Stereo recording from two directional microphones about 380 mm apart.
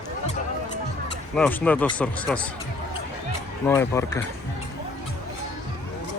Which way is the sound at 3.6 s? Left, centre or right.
Centre.